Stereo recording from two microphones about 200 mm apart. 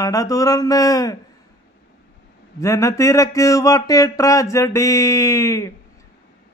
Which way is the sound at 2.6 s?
15° left (ahead or behind).